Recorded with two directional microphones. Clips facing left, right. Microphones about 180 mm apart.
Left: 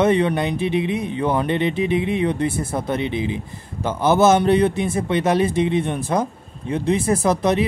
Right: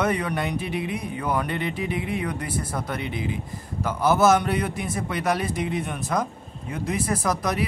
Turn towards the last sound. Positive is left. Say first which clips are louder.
# left 7 dB
turn(degrees=25)  # may be behind; listen again after turning